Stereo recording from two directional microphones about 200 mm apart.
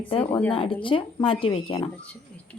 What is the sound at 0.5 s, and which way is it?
A woman's voice, 25° left (ahead or behind).